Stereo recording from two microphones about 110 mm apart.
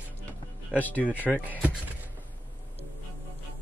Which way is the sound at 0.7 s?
15° left (ahead or behind).